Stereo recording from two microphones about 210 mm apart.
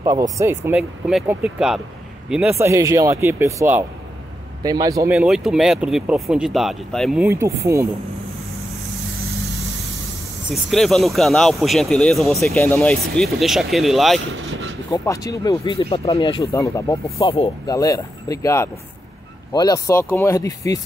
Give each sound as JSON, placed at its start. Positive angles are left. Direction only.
{"t": 0.0, "sound": "speech", "side_deg": -15}
{"t": 0.7, "sound": "a man's voice", "side_deg": -5}
{"t": 5.1, "sound": "speech", "side_deg": -5}
{"t": 10.5, "sound": "speech", "side_deg": 0}
{"t": 14.3, "sound": "vehicle", "side_deg": -65}
{"t": 14.9, "sound": "speech", "side_deg": 15}